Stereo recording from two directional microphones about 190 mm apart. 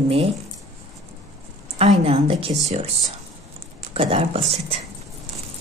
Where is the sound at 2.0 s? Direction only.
30° right (ahead or behind).